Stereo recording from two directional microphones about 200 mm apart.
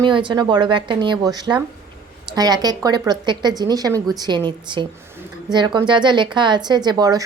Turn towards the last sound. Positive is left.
turn(degrees=-20)  # may be behind; listen again after turning